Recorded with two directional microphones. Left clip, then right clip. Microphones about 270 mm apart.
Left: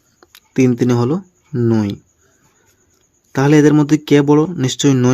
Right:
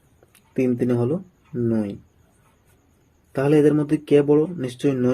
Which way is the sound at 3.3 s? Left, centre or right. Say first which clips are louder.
Left 6 dB; left.